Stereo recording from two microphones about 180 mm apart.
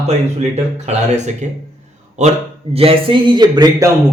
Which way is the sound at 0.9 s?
40° right (ahead or behind).